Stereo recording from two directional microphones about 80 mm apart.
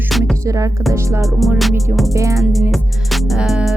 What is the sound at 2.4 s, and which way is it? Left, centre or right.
Music, centre.